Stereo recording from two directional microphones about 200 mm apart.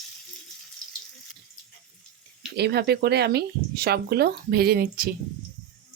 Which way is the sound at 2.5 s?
55° right (ahead or behind).